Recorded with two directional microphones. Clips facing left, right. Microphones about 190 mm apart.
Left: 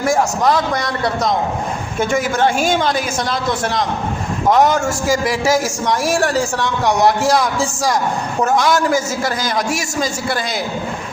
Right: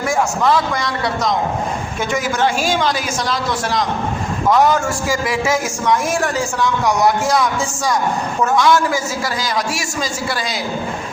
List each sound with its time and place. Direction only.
0.0 s a man's voice: 40° left (ahead or behind)
4.5 s a man's voice: 40° left (ahead or behind)
8.4 s a woman's voice: 45° left (ahead or behind)